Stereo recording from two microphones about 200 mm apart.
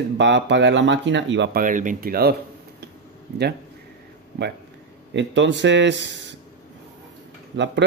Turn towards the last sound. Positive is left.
turn(degrees=-60)  # may be behind; listen again after turning